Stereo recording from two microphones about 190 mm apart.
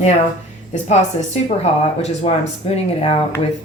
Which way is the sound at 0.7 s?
35° left (ahead or behind).